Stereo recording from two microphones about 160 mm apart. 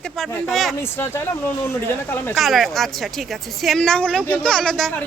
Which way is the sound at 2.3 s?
Centre (ahead or behind).